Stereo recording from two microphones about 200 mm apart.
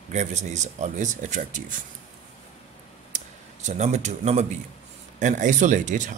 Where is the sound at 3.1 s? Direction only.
35° right (ahead or behind).